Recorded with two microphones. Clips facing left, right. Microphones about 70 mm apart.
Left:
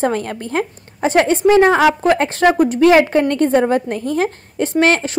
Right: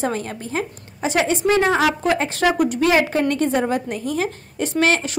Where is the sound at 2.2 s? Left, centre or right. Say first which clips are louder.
Left 5 dB; left.